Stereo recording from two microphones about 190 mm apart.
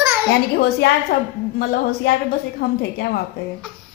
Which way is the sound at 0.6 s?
55° left (ahead or behind).